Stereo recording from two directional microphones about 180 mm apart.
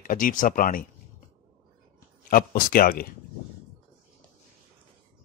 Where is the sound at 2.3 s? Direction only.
55° left (ahead or behind).